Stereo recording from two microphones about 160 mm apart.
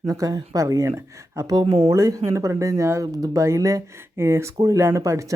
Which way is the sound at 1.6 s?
35° right (ahead or behind).